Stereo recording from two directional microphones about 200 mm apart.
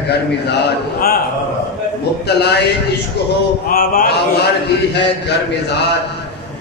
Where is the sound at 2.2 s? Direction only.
55° left (ahead or behind).